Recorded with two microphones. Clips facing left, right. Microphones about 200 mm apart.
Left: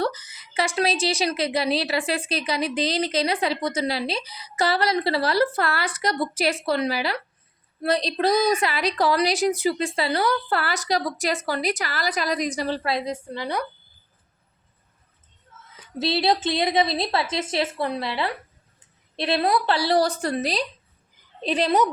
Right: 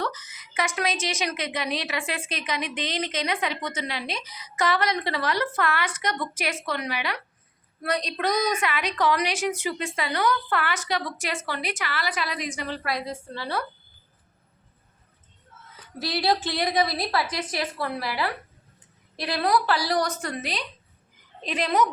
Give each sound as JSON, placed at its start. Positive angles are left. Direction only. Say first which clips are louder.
{"t": 0.0, "sound": "a woman's voice", "louder": "left 5 dB", "side_deg": 30}
{"t": 16.0, "sound": "a woman's voice", "louder": "left 3 dB", "side_deg": 25}